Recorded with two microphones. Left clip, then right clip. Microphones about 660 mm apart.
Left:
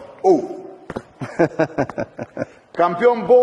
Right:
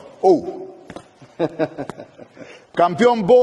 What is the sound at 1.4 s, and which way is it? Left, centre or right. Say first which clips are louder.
Speech: left 4 dB; left.